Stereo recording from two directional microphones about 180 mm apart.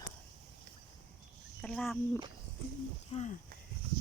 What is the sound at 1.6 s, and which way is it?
Speech, 5° left (ahead or behind).